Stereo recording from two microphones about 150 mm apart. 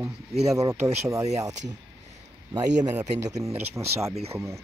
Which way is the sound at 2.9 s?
25° right (ahead or behind).